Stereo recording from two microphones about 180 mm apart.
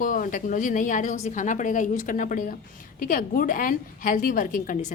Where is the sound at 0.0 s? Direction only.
50° left (ahead or behind).